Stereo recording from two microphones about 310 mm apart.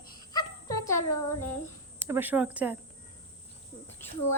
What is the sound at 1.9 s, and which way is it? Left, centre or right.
Speech, centre.